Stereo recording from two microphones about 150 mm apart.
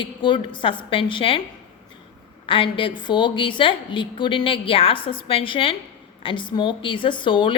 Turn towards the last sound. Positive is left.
turn(degrees=35)  # may be behind; listen again after turning